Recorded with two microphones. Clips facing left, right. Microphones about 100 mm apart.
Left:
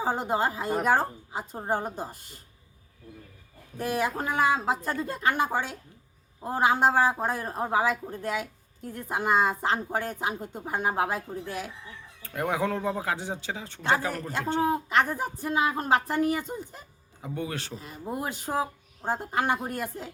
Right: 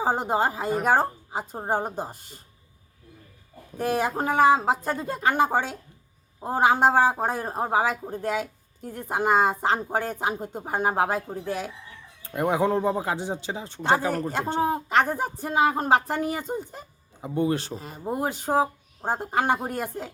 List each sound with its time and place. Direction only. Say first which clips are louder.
0.0 s speech: right 3 dB; 25° right (ahead or behind)
3.8 s speech: right 3 dB; 30° right (ahead or behind)